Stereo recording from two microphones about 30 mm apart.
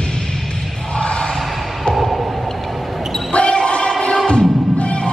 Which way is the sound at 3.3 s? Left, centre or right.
Left.